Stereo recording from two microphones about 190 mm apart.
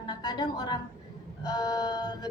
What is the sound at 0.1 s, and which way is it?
A woman's voice, 20° left (ahead or behind).